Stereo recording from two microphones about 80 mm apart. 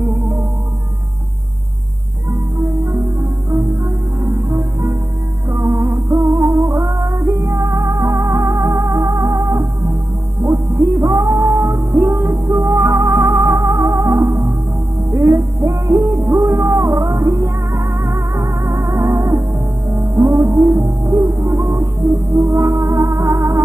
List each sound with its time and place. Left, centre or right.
2.8 s music: right
5.5 s music: right
6.1 s music: right
11.1 s music: right